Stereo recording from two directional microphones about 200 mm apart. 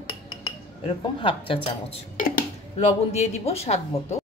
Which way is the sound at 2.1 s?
45° left (ahead or behind).